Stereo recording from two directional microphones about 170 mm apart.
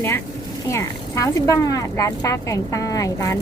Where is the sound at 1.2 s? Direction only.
20° left (ahead or behind).